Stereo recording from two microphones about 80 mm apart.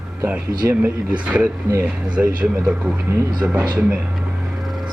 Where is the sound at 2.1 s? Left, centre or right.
Centre.